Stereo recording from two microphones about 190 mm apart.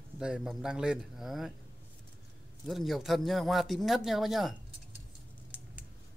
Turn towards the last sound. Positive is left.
turn(degrees=0)  # may be behind; listen again after turning